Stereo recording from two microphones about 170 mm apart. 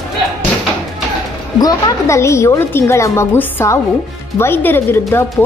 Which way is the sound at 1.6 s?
15° left (ahead or behind).